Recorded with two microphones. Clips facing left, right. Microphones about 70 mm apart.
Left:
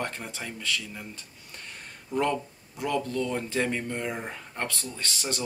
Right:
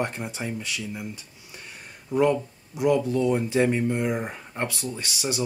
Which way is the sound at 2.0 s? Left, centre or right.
Centre.